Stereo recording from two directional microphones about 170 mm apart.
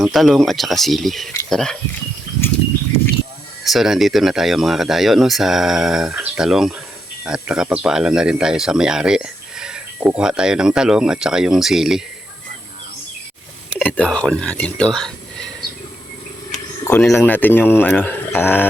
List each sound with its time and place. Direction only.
0.0 s speech: centre (ahead or behind)
3.6 s speech: centre (ahead or behind)
13.7 s speech: 5° left (ahead or behind)
16.8 s speech: 15° left (ahead or behind)